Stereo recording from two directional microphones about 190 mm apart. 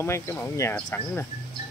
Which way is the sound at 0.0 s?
15° left (ahead or behind).